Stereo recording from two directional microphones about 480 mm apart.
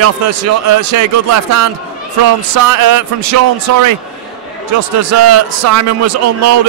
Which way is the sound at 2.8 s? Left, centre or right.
Right.